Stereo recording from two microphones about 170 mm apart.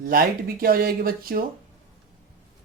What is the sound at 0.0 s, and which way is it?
Speech, 60° right (ahead or behind).